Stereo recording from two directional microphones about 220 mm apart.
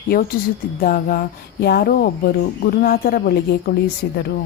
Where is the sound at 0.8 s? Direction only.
40° left (ahead or behind).